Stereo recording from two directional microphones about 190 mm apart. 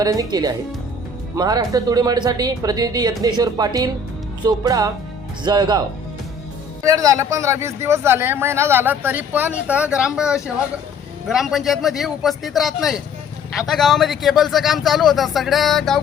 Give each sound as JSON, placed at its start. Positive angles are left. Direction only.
{"t": 0.0, "sound": "speech", "side_deg": -20}
{"t": 6.8, "sound": "a man's voice", "side_deg": -20}